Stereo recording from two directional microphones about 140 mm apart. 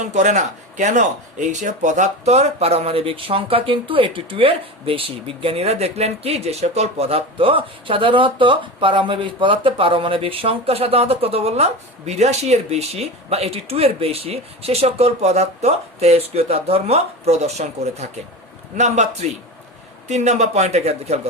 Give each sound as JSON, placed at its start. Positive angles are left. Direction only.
{"t": 0.0, "sound": "a man's voice", "side_deg": -60}